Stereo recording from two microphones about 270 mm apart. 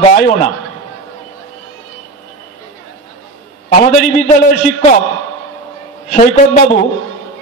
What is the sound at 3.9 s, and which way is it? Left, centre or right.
Speech, left.